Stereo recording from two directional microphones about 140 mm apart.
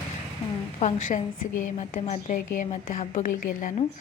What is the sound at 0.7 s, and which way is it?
A woman's voice, 55° left (ahead or behind).